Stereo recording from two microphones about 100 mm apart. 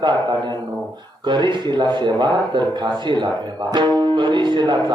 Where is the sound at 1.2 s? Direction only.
50° right (ahead or behind).